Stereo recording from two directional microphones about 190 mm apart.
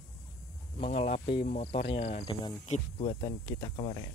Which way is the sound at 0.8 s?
30° left (ahead or behind).